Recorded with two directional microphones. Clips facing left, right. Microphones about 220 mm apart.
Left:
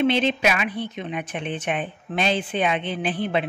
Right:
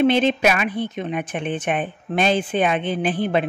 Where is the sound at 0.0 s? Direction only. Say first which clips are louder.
Right 4 dB; 50° right (ahead or behind).